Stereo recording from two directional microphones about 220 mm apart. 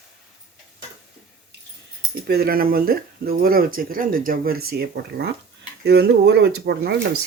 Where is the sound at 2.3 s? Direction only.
45° right (ahead or behind).